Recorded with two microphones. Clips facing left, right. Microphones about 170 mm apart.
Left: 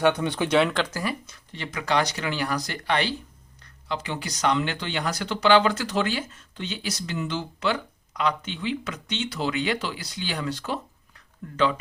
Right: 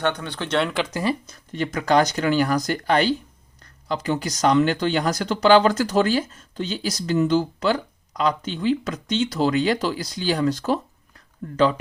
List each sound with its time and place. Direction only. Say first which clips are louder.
0.0 s speech: left 3 dB; 15° left (ahead or behind)
1.3 s speech: right 9 dB; 45° right (ahead or behind)